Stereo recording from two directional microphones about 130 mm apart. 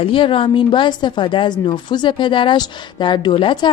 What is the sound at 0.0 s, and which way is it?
A woman's voice, 40° left (ahead or behind).